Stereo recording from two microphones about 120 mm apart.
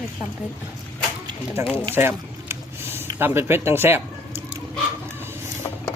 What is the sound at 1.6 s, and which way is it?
Speech, 20° right (ahead or behind).